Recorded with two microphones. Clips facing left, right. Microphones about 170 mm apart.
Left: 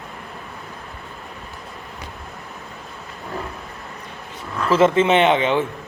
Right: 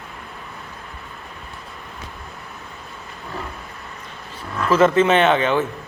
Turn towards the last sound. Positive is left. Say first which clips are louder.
# even
turn(degrees=20)  # may be behind; listen again after turning